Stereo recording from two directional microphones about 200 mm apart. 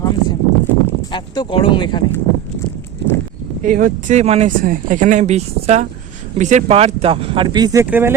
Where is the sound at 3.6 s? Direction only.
40° right (ahead or behind).